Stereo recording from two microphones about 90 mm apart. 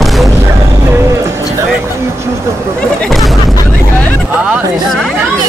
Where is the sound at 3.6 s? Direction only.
20° left (ahead or behind).